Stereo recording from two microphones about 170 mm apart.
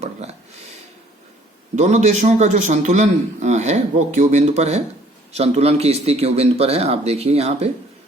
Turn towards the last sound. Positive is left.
turn(degrees=-40)  # may be behind; listen again after turning